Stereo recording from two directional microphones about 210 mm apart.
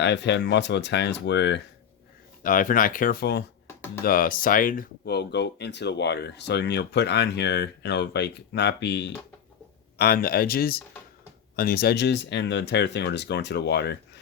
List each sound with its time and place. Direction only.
0.0 s speech: 55° left (ahead or behind)
2.4 s speech: 40° left (ahead or behind)